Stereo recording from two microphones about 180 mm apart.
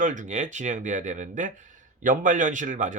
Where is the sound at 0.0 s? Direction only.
45° right (ahead or behind).